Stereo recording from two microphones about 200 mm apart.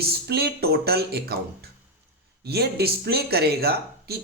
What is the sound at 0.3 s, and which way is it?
Speech, 50° right (ahead or behind).